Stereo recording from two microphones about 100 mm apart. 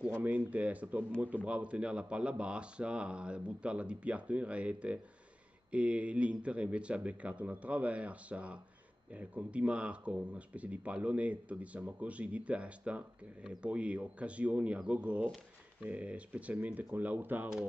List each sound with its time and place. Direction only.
0.2 s speech: 15° right (ahead or behind)